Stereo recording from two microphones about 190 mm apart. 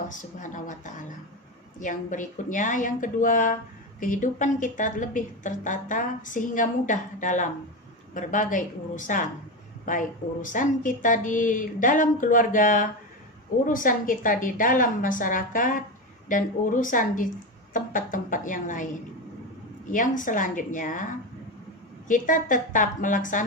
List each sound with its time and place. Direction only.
0.3 s speech: 40° left (ahead or behind)
19.9 s speech: 45° left (ahead or behind)